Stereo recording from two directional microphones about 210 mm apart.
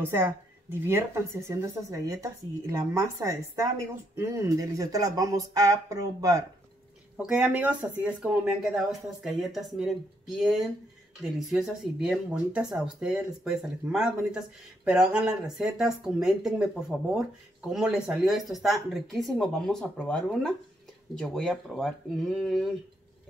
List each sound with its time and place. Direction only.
0.0 s speech: 10° right (ahead or behind)
7.2 s speech: 5° right (ahead or behind)
17.6 s speech: 5° right (ahead or behind)